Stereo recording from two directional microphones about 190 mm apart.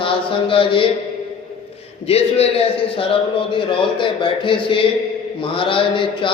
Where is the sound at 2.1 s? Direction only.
30° left (ahead or behind).